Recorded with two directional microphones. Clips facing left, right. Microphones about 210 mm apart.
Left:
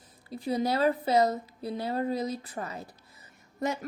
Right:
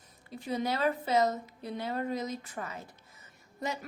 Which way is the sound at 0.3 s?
35° left (ahead or behind).